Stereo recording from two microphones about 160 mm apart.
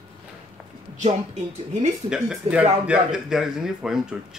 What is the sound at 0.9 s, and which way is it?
Speech, 45° right (ahead or behind).